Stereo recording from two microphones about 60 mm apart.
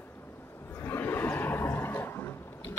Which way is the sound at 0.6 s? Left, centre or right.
Left.